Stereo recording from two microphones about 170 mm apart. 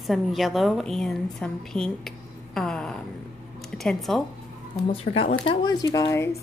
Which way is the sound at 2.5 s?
5° left (ahead or behind).